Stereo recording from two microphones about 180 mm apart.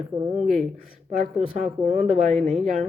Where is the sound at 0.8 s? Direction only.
50° right (ahead or behind).